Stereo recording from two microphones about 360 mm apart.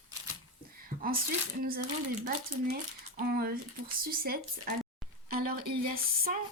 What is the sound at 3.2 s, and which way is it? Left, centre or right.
Speech, right.